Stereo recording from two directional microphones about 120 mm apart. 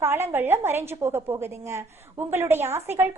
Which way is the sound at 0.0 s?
20° right (ahead or behind).